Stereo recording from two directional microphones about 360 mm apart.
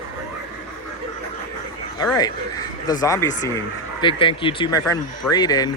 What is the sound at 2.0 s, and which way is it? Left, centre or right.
Speech, centre.